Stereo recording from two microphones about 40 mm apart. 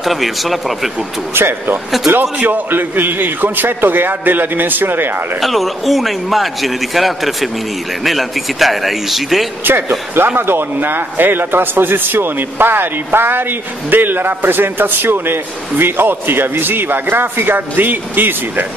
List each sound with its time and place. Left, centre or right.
0.0 s a man's voice: centre
1.3 s speech: right
2.3 s a man's voice: right
2.7 s speech: right
5.4 s a man's voice: centre
9.7 s speech: right